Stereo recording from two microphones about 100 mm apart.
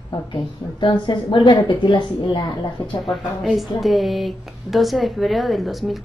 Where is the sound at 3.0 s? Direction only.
Centre (ahead or behind).